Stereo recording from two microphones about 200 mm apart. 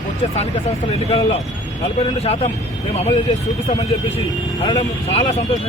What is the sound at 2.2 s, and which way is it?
Speech, 30° left (ahead or behind).